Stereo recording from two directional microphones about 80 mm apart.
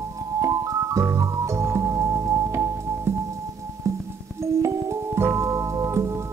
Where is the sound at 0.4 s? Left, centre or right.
Right.